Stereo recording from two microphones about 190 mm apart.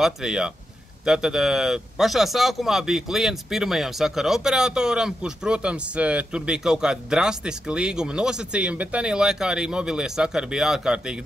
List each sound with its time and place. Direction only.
0.0 s speech: 5° right (ahead or behind)